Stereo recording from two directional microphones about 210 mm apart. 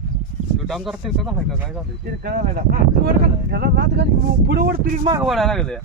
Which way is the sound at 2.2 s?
45° right (ahead or behind).